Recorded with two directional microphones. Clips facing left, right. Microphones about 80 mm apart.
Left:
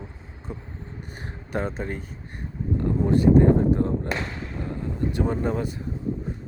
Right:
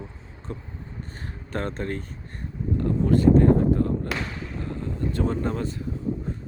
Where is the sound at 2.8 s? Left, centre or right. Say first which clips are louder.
Even; left.